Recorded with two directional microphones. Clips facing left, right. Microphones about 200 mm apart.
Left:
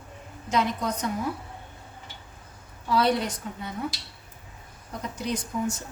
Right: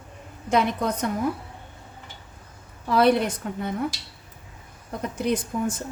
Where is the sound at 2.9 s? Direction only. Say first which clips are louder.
Right 4 dB; 55° right (ahead or behind).